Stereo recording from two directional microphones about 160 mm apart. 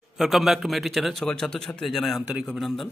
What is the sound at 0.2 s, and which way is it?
A man's voice, centre (ahead or behind).